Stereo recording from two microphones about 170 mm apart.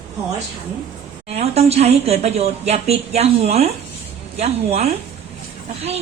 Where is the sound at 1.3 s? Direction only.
40° right (ahead or behind).